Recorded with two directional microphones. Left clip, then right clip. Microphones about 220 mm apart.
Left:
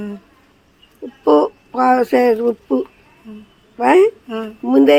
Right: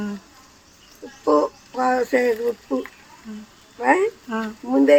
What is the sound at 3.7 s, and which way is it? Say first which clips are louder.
Speech: left 7 dB; 55° left (ahead or behind).